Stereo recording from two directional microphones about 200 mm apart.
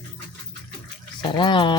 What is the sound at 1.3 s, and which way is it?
Speech, 25° left (ahead or behind).